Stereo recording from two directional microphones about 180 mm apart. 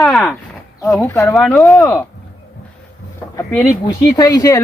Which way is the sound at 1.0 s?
20° left (ahead or behind).